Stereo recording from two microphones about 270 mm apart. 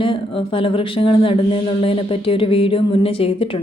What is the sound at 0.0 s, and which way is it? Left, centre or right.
A woman's voice, centre.